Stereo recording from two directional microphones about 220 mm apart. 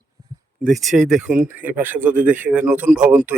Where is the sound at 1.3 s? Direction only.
35° right (ahead or behind).